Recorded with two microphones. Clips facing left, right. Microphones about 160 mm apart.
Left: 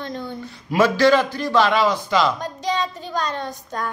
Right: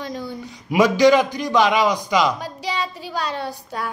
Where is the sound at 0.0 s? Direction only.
10° right (ahead or behind).